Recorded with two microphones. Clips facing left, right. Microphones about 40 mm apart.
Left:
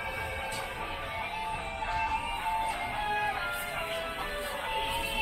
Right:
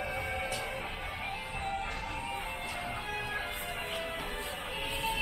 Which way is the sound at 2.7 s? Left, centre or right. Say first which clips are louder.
Left 5 dB; left.